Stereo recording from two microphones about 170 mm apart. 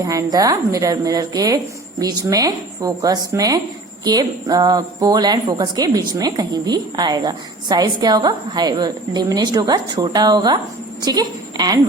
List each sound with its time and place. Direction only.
0.0 s a woman's voice: 20° right (ahead or behind)